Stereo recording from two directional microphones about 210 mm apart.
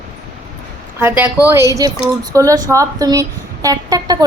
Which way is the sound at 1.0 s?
10° right (ahead or behind).